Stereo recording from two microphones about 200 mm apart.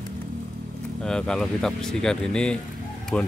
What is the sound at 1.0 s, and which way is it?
Speech, 5° left (ahead or behind).